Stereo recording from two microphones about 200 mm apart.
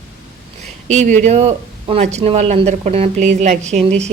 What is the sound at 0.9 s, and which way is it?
Speech, 35° right (ahead or behind).